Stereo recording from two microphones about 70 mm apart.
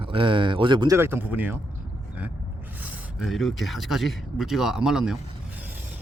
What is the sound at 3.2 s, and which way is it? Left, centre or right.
Speech, centre.